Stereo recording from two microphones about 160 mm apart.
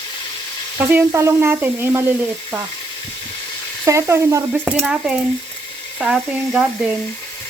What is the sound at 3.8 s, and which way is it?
Speech, 20° right (ahead or behind).